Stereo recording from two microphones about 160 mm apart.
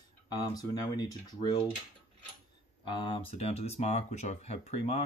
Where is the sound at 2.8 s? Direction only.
30° left (ahead or behind).